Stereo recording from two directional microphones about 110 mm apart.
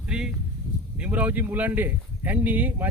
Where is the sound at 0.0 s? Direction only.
10° right (ahead or behind).